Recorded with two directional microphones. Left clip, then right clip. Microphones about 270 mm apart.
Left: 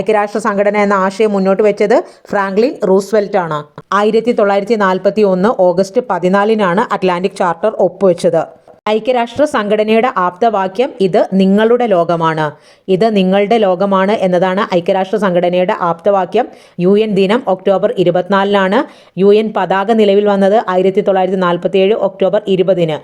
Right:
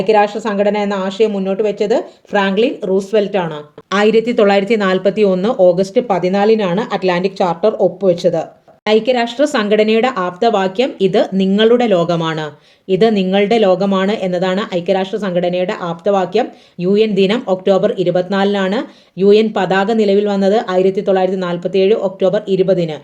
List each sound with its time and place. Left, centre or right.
0.3 s speech: centre
2.8 s speech: left